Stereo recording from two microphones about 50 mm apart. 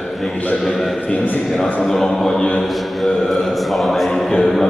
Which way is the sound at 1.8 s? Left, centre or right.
Centre.